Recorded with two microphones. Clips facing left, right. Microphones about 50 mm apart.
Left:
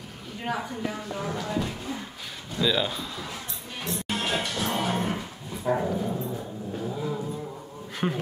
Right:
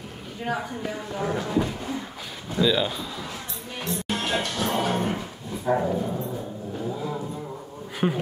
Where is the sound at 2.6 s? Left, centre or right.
Centre.